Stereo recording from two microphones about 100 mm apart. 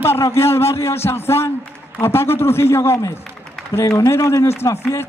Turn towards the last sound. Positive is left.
turn(degrees=30)  # may be behind; listen again after turning